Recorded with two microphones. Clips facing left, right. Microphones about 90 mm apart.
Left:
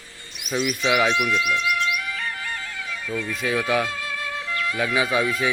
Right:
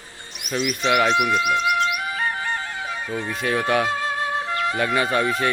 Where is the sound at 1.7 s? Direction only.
35° right (ahead or behind).